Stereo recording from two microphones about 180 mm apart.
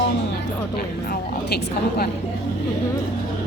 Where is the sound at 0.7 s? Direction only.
60° left (ahead or behind).